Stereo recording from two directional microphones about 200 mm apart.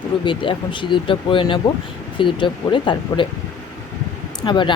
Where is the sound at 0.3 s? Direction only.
25° left (ahead or behind).